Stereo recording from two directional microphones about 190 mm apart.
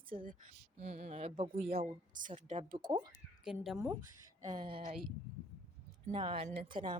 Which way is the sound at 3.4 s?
Centre (ahead or behind).